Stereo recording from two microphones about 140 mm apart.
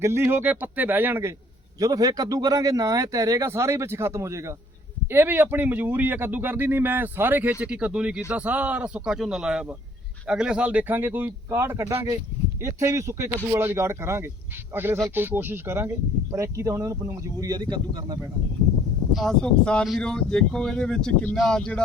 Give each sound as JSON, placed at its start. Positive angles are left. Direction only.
{"t": 0.0, "sound": "speech", "side_deg": -20}
{"t": 1.8, "sound": "speech", "side_deg": -25}
{"t": 19.1, "sound": "speech", "side_deg": 5}